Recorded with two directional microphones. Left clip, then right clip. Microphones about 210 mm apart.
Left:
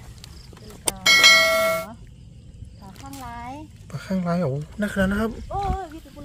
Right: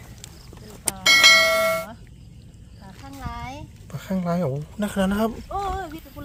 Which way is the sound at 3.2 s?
25° right (ahead or behind).